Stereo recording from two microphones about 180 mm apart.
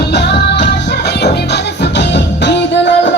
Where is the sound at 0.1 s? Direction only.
70° left (ahead or behind).